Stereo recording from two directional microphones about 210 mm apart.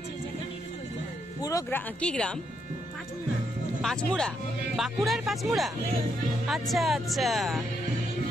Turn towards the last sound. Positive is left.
turn(degrees=0)  # may be behind; listen again after turning